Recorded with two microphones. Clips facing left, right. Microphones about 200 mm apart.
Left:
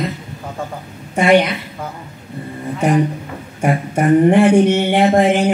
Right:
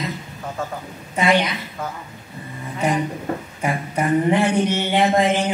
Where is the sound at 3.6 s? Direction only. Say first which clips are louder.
Left 9 dB; 50° left (ahead or behind).